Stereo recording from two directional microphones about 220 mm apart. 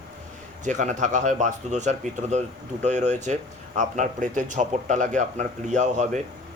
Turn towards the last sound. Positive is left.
turn(degrees=-35)  # may be behind; listen again after turning